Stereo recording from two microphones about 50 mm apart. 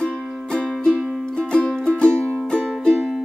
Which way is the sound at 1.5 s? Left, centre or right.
Centre.